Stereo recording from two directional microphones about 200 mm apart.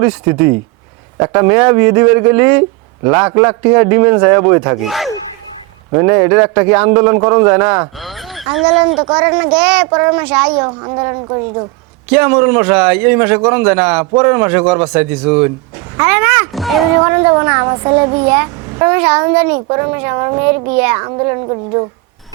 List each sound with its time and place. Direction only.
0.0 s a man's voice: 10° right (ahead or behind)
4.8 s speech: centre (ahead or behind)
5.9 s a man's voice: 10° right (ahead or behind)
8.7 s a woman's voice: 30° right (ahead or behind)
9.2 s a man's voice: 15° right (ahead or behind)
9.6 s a man's voice: 5° right (ahead or behind)
10.5 s a woman's voice: 20° right (ahead or behind)
12.0 s a man's voice: 10° right (ahead or behind)
17.1 s a man's voice: 10° right (ahead or behind)